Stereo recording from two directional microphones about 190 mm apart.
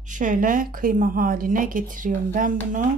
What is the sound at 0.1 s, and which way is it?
A woman's voice, 40° right (ahead or behind).